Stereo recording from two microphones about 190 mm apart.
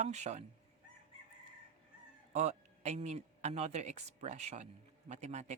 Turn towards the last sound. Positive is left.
turn(degrees=-35)  # may be behind; listen again after turning